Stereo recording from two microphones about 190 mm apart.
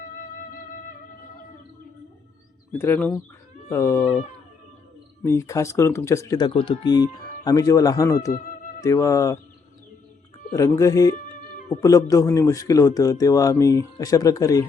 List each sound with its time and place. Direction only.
2.7 s speech: 10° left (ahead or behind)
5.2 s speech: 15° left (ahead or behind)
10.5 s speech: 15° left (ahead or behind)